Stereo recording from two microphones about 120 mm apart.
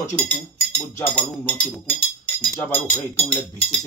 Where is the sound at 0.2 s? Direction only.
10° left (ahead or behind).